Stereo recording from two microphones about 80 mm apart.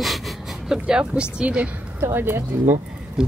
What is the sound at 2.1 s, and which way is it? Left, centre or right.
Speech, right.